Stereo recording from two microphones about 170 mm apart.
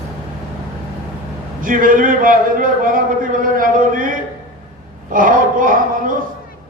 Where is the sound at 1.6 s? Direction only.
55° right (ahead or behind).